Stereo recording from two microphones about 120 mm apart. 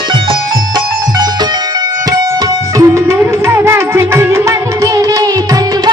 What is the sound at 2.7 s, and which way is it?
Music, 25° right (ahead or behind).